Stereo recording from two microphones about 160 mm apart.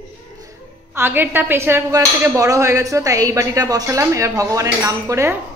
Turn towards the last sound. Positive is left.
turn(degrees=-15)  # may be behind; listen again after turning